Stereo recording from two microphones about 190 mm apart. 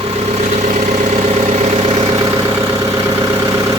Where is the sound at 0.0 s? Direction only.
30° right (ahead or behind).